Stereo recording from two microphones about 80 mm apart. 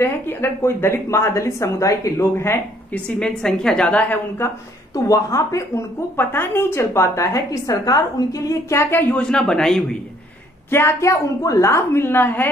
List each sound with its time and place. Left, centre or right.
0.0 s a woman's voice: left
2.9 s a woman's voice: centre
4.9 s speech: left
6.1 s a woman's voice: left
9.1 s a woman's voice: centre
10.7 s a woman's voice: left